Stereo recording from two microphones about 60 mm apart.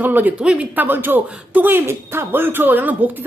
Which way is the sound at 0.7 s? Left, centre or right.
Right.